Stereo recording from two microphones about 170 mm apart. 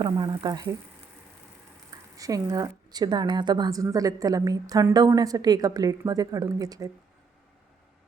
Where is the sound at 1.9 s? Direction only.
20° right (ahead or behind).